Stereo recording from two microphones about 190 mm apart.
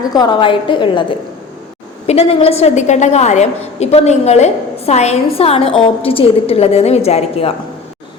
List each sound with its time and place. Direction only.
0.1 s a woman's voice: 20° left (ahead or behind)
2.0 s a woman's voice: 30° left (ahead or behind)